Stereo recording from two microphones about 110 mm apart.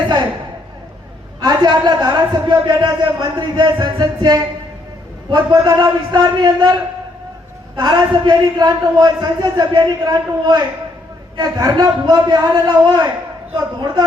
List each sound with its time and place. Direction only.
1.4 s a man's voice: 40° right (ahead or behind)
7.8 s a man's voice: 40° right (ahead or behind)